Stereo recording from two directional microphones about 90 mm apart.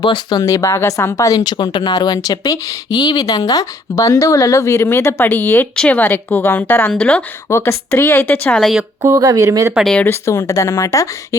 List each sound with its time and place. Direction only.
0.0 s speech: 55° left (ahead or behind)
0.4 s speech: 35° left (ahead or behind)
1.5 s a woman's voice: 55° left (ahead or behind); by 7.2 s 15° left (ahead or behind)
7.5 s a woman's voice: 30° left (ahead or behind); by 8.6 s 15° left (ahead or behind)
9.0 s speech: 40° right (ahead or behind)
10.0 s speech: 30° left (ahead or behind)